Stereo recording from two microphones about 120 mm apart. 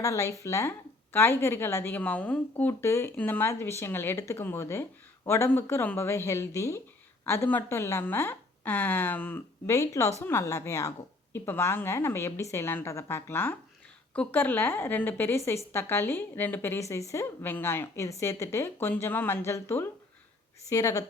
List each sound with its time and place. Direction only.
0.0 s a woman's voice: 25° left (ahead or behind)
9.7 s a woman's voice: 25° left (ahead or behind)